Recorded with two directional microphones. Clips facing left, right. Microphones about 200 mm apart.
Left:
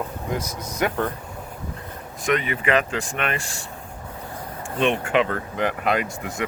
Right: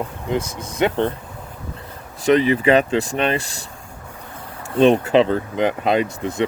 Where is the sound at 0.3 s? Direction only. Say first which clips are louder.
Right 8 dB; 25° right (ahead or behind).